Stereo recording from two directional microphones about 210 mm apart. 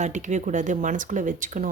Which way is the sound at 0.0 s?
35° right (ahead or behind).